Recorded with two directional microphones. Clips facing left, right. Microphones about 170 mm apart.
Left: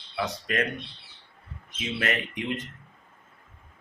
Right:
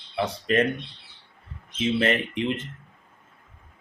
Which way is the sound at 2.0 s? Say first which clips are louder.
Right 6 dB; 25° right (ahead or behind).